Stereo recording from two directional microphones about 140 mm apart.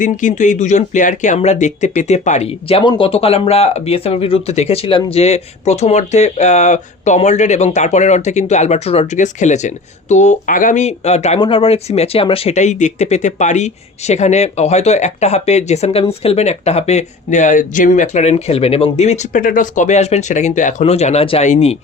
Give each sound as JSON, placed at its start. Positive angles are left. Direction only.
{"t": 0.0, "sound": "speech", "side_deg": 65}
{"t": 2.6, "sound": "speech", "side_deg": 40}
{"t": 11.3, "sound": "speech", "side_deg": 40}